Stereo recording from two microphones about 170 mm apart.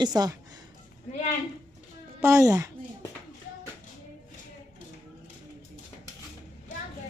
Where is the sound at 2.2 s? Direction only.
20° right (ahead or behind).